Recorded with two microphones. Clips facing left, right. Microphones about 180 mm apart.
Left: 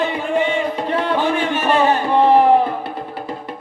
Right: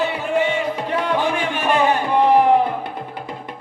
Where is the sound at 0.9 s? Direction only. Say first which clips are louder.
Left 2 dB; 10° right (ahead or behind).